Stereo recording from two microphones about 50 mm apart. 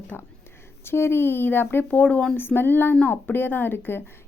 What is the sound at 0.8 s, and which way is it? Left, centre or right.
A woman's voice, left.